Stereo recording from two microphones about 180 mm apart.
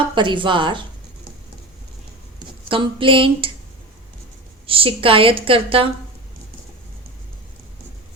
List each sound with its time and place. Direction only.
0.1 s a woman's voice: 25° right (ahead or behind)
2.6 s a woman's voice: 30° right (ahead or behind)
4.6 s a woman's voice: 30° right (ahead or behind)